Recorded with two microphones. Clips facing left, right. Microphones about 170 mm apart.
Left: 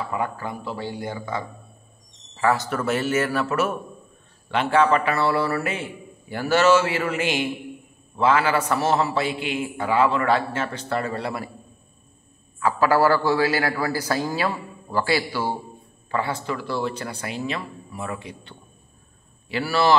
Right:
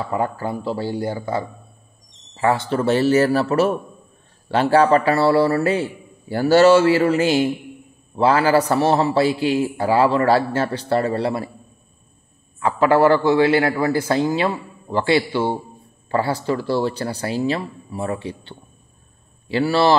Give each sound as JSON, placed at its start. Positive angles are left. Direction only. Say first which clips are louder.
{"t": 0.1, "sound": "a man's voice", "louder": "right 5 dB", "side_deg": -35}
{"t": 12.5, "sound": "a man's voice", "louder": "right 3 dB", "side_deg": -25}